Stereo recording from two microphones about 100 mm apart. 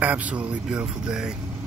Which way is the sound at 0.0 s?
15° right (ahead or behind).